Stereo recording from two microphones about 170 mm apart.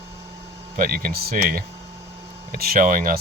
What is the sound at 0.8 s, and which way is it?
Speech, 55° right (ahead or behind).